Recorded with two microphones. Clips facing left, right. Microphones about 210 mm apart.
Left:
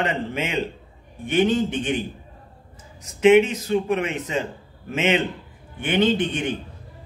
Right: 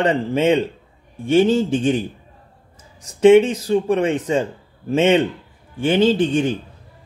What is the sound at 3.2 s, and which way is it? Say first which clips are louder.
A man's voice: right 4 dB; 30° right (ahead or behind).